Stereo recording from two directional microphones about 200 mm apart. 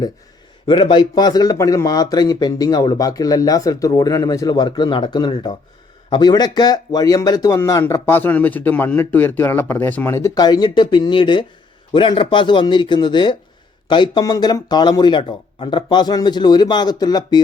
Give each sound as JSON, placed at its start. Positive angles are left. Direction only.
{"t": 0.7, "sound": "speech", "side_deg": 25}